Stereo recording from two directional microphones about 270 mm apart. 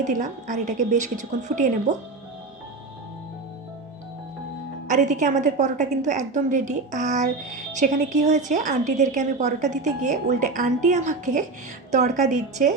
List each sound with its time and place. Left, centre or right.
0.0 s a woman's voice: right
4.9 s a woman's voice: right